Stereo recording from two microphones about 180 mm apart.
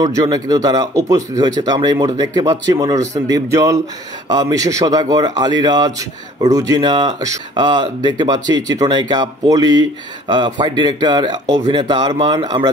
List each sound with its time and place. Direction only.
0.0 s a man's voice: 20° right (ahead or behind)